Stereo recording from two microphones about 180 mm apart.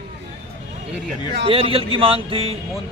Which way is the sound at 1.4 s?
30° right (ahead or behind).